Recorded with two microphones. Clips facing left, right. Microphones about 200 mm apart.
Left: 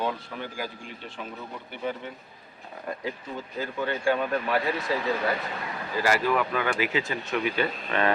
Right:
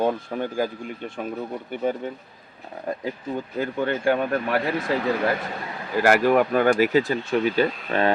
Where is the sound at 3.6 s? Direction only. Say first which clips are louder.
Right 4 dB; 55° right (ahead or behind).